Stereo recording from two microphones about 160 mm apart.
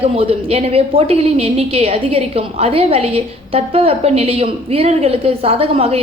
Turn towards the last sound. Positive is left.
turn(degrees=-35)  # may be behind; listen again after turning